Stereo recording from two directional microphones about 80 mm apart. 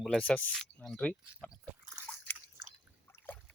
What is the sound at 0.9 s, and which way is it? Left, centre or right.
Speech, centre.